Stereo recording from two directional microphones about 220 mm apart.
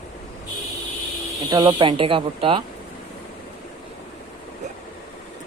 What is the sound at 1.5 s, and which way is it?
Speech, 20° right (ahead or behind).